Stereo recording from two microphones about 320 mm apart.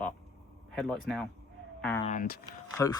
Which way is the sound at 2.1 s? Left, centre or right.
Left.